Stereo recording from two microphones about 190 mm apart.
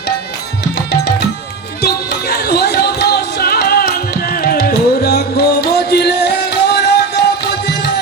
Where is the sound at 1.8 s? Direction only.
60° left (ahead or behind).